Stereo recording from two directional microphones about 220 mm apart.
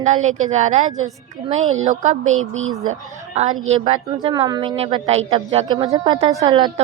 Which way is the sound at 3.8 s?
20° right (ahead or behind).